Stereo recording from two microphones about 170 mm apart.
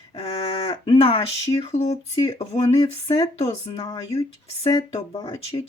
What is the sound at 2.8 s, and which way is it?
Speech, 20° left (ahead or behind).